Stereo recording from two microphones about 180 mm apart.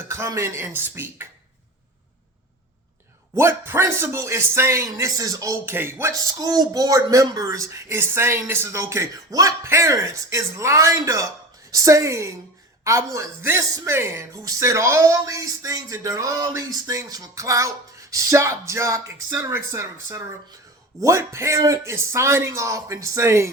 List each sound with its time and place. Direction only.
0.1 s a man's voice: 15° right (ahead or behind)
3.3 s a man's voice: 15° right (ahead or behind)